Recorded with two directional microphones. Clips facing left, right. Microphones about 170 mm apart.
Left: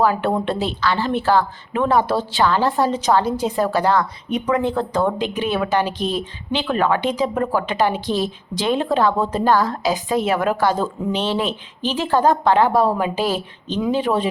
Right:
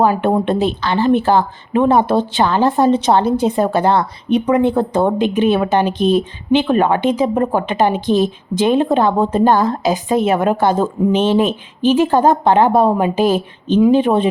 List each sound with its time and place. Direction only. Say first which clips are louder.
0.0 s speech: right 4 dB; 20° right (ahead or behind)
5.8 s speech: right 8 dB; 55° right (ahead or behind)
6.5 s speech: right 6 dB; 20° right (ahead or behind)